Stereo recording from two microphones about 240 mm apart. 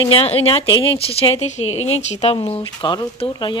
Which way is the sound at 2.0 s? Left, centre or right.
Left.